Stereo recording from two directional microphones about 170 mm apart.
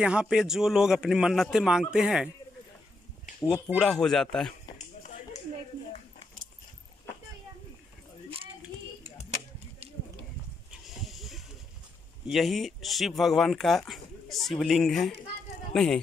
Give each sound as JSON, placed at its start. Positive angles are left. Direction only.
{"t": 0.0, "sound": "speech", "side_deg": -5}
{"t": 3.3, "sound": "speech", "side_deg": 25}
{"t": 3.6, "sound": "speech", "side_deg": 0}
{"t": 10.9, "sound": "snake", "side_deg": 0}
{"t": 12.3, "sound": "speech", "side_deg": 0}